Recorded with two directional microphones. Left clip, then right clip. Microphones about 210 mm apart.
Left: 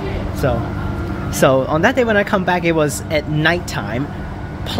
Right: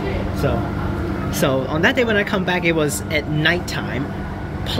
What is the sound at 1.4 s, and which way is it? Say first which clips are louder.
Speech: left 6 dB; 30° left (ahead or behind).